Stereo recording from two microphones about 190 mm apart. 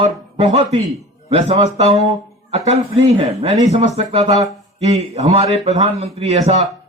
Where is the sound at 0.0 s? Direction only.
30° right (ahead or behind).